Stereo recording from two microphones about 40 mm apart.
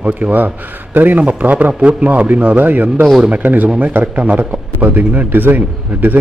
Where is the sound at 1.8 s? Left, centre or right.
Right.